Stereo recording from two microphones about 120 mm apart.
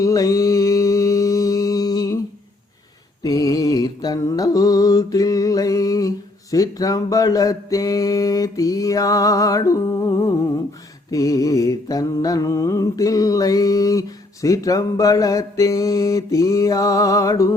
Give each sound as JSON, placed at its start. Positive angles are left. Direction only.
{"t": 0.0, "sound": "mantra", "side_deg": 30}
{"t": 3.2, "sound": "mantra", "side_deg": 30}